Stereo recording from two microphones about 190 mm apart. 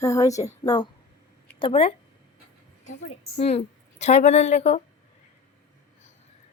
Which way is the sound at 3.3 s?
35° left (ahead or behind).